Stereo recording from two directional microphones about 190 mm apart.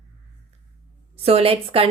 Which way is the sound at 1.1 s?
30° right (ahead or behind).